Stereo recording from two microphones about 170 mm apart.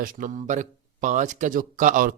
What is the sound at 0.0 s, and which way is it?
Speech, 50° right (ahead or behind).